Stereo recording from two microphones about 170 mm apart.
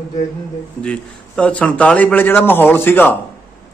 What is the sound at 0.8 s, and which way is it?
A man's voice, 5° left (ahead or behind).